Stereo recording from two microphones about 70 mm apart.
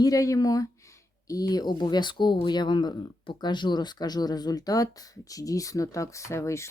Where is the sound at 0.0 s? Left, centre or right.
Left.